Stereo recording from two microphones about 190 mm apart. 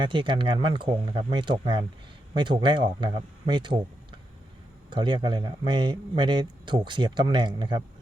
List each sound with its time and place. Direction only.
0.0 s speech: 25° right (ahead or behind)